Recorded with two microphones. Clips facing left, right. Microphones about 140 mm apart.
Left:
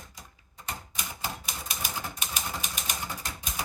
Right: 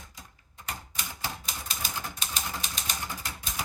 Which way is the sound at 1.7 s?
5° left (ahead or behind).